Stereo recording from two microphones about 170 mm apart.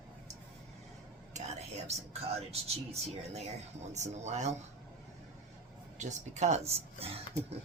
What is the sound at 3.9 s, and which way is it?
Speech, 40° right (ahead or behind).